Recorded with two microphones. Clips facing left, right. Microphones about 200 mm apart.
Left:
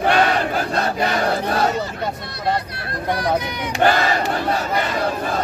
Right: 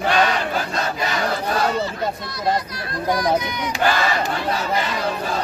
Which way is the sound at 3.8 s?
40° left (ahead or behind).